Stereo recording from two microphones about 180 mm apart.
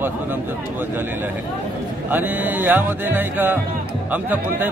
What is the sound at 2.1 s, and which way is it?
A man's voice, 10° right (ahead or behind).